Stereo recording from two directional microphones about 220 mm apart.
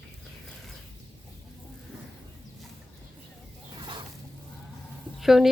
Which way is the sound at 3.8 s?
20° right (ahead or behind).